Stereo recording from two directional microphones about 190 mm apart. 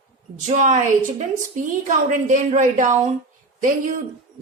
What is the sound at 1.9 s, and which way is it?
A woman's voice, 40° right (ahead or behind).